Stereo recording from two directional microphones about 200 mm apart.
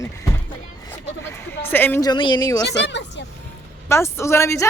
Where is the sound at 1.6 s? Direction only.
10° left (ahead or behind).